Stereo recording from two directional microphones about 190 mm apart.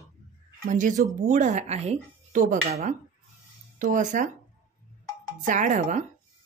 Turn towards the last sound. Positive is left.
turn(degrees=-35)  # may be behind; listen again after turning